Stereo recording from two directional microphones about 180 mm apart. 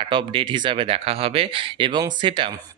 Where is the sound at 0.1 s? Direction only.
30° right (ahead or behind).